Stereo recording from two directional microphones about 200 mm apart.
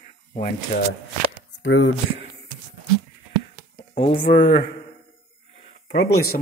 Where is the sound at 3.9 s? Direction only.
25° left (ahead or behind).